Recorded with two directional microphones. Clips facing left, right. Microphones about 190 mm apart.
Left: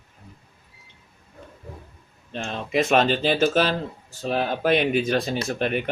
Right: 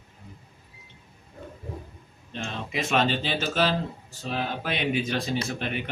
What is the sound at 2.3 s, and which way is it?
Speech, 50° left (ahead or behind).